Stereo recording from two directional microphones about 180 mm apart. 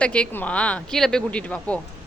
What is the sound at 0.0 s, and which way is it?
Speech, 5° left (ahead or behind).